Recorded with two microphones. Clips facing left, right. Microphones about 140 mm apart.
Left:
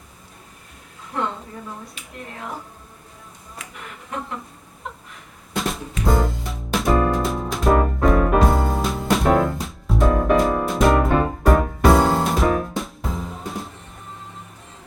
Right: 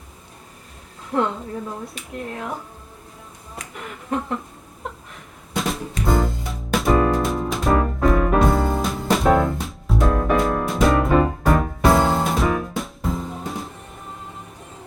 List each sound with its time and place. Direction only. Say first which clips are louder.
1.1 s a woman's voice: right 5 dB; 35° right (ahead or behind)
5.5 s music: right 1 dB; centre (ahead or behind)